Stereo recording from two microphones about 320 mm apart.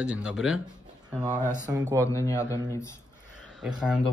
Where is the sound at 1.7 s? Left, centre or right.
Centre.